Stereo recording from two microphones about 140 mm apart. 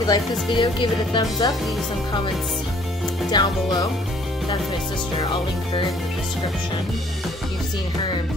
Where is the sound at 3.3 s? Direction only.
30° left (ahead or behind).